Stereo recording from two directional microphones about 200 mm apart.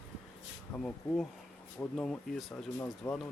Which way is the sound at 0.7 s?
5° left (ahead or behind).